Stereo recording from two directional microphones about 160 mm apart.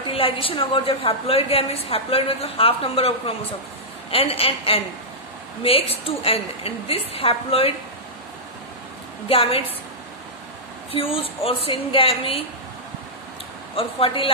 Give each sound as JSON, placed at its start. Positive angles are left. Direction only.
{"t": 0.1, "sound": "a woman's voice", "side_deg": 35}
{"t": 9.3, "sound": "a woman's voice", "side_deg": 35}
{"t": 10.9, "sound": "a woman's voice", "side_deg": 35}
{"t": 13.7, "sound": "a woman's voice", "side_deg": 35}